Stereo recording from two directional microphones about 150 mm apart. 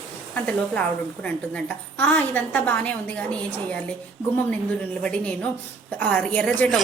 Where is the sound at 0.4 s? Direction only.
10° left (ahead or behind).